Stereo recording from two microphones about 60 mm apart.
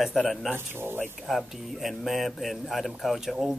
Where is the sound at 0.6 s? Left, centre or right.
Right.